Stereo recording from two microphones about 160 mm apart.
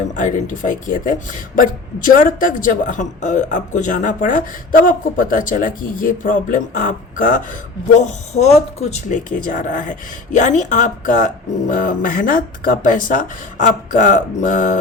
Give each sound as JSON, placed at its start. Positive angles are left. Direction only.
{"t": 0.2, "sound": "speech", "side_deg": 55}
{"t": 7.9, "sound": "speech", "side_deg": 45}